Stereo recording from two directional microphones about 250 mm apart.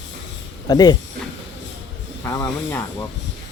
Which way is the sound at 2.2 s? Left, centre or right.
Centre.